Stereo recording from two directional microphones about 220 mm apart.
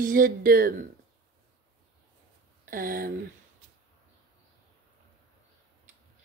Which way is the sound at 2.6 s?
40° right (ahead or behind).